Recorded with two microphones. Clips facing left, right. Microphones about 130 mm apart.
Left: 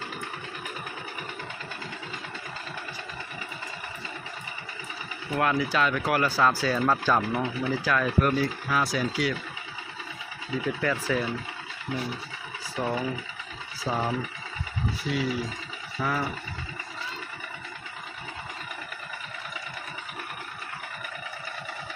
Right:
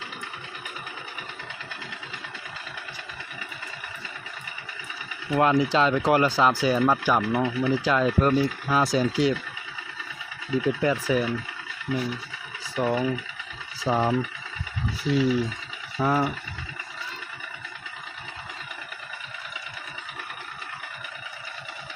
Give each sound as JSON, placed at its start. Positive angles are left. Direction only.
{"t": 5.3, "sound": "speech", "side_deg": -25}
{"t": 10.8, "sound": "speech", "side_deg": -15}
{"t": 12.7, "sound": "speech", "side_deg": -20}